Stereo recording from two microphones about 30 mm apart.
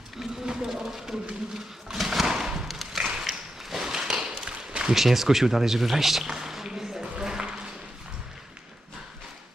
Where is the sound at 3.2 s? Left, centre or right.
Centre.